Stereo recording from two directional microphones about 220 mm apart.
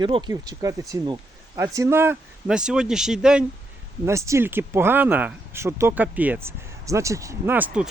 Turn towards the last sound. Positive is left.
turn(degrees=-5)  # may be behind; listen again after turning